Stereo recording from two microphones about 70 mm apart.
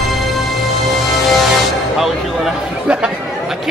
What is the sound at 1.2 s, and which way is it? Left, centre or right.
Music, centre.